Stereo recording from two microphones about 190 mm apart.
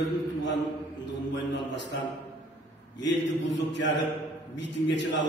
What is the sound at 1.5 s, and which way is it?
Speech, 70° left (ahead or behind).